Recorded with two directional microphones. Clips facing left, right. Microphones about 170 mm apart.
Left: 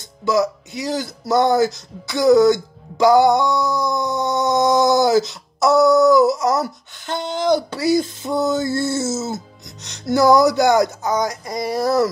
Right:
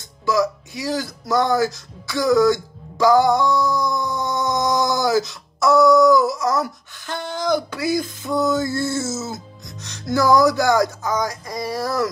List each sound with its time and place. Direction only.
0.2 s speech: 20° left (ahead or behind)